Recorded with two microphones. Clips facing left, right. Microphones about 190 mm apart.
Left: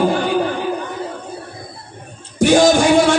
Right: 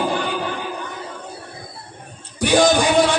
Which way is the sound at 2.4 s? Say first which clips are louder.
Left 4 dB; 45° left (ahead or behind).